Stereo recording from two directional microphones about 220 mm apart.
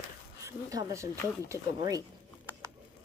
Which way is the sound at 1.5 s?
15° right (ahead or behind).